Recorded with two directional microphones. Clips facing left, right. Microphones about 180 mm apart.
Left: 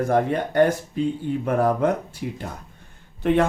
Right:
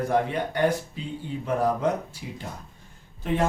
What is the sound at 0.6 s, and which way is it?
Speech, 50° left (ahead or behind).